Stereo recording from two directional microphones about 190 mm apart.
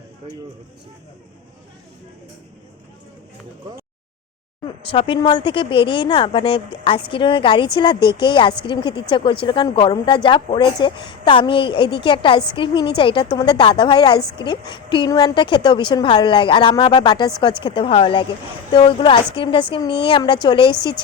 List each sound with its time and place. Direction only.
4.8 s speech: 30° left (ahead or behind)